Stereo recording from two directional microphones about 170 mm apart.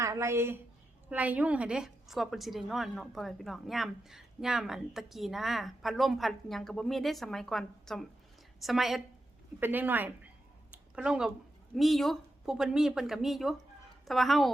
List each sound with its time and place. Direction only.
0.0 s a woman's voice: 20° right (ahead or behind); by 9.0 s centre (ahead or behind)
9.6 s speech: 10° right (ahead or behind)
10.7 s a sound: 5° right (ahead or behind)
11.7 s a woman's voice: centre (ahead or behind)